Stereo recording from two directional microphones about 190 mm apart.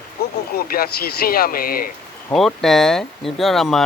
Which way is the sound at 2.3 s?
Centre (ahead or behind).